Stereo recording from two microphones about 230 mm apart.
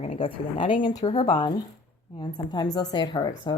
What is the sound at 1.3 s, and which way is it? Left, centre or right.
Speech, centre.